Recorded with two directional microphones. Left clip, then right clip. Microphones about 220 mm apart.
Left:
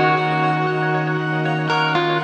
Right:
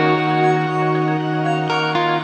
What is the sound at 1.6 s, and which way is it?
Music, centre (ahead or behind).